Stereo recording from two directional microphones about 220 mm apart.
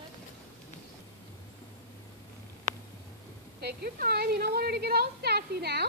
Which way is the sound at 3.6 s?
45° right (ahead or behind).